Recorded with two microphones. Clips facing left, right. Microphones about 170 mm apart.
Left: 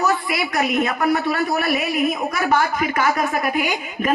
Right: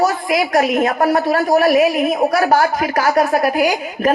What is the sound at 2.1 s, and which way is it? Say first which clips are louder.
Speech: right 8 dB; 70° right (ahead or behind).